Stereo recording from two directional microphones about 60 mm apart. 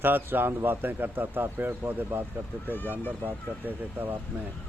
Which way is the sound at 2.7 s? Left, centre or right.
Left.